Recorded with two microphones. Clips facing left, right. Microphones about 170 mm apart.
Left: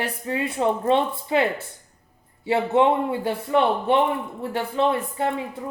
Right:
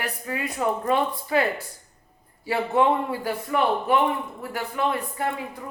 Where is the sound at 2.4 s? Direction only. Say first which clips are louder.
Left 3 dB; 25° left (ahead or behind).